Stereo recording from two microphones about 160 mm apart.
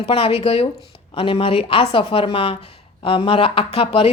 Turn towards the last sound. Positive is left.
turn(degrees=35)  # may be behind; listen again after turning